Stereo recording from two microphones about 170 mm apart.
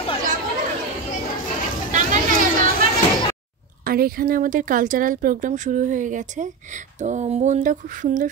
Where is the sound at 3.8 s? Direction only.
60° right (ahead or behind).